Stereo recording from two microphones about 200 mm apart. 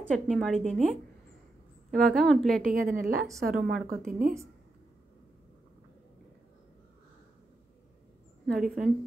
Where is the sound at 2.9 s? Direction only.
45° right (ahead or behind).